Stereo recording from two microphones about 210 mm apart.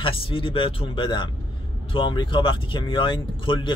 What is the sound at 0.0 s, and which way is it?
Speech, 25° left (ahead or behind).